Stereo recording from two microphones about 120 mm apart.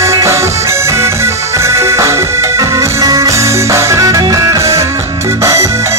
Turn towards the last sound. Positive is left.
turn(degrees=-25)  # may be behind; listen again after turning